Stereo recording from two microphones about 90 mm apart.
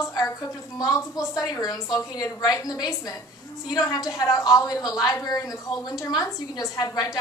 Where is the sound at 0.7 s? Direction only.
45° left (ahead or behind).